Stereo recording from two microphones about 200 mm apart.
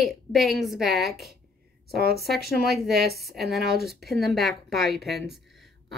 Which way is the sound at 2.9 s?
50° right (ahead or behind).